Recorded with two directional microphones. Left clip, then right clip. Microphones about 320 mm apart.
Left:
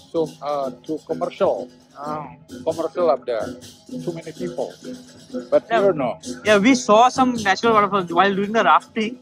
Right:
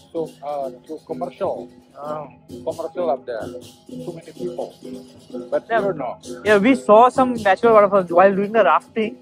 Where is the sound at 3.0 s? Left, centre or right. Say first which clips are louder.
Left 3 dB; left.